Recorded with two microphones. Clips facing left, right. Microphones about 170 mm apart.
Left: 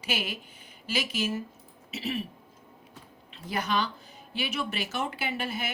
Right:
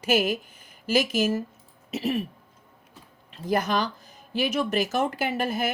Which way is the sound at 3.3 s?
45° right (ahead or behind).